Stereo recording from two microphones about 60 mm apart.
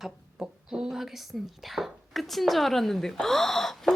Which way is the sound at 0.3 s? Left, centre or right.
Centre.